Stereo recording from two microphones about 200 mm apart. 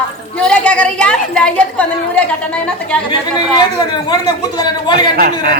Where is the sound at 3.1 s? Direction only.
20° left (ahead or behind).